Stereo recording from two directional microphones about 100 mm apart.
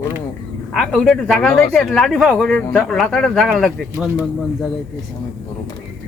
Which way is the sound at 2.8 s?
5° left (ahead or behind).